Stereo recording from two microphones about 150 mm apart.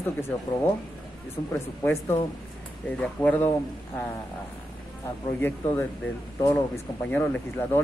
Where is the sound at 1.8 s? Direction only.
20° left (ahead or behind).